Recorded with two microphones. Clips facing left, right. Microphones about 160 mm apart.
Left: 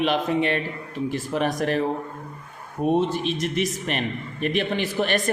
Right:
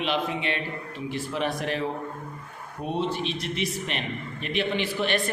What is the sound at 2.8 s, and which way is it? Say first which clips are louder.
A man's voice: left 6 dB; 50° left (ahead or behind).